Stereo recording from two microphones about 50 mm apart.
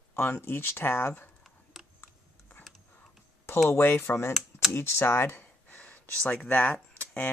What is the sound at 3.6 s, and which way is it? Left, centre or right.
Speech, left.